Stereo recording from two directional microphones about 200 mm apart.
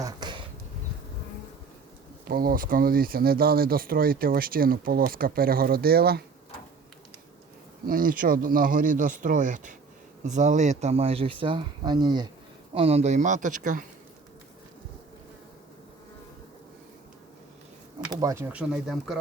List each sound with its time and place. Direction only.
0.0 s a sound: 20° right (ahead or behind)
2.2 s speech: 45° right (ahead or behind)
7.9 s speech: 45° right (ahead or behind)
18.1 s speech: 15° right (ahead or behind); by 19.2 s centre (ahead or behind)